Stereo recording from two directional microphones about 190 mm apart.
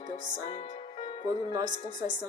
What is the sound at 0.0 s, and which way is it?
Music, 35° left (ahead or behind).